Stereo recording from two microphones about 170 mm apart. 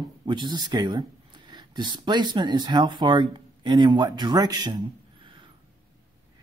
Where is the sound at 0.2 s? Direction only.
25° right (ahead or behind).